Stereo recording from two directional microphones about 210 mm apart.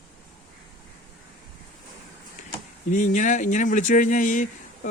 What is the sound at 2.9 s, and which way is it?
Speech, 35° left (ahead or behind).